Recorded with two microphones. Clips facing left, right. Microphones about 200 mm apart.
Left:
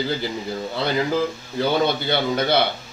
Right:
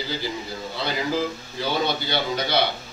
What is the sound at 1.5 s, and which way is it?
Speech, 55° left (ahead or behind).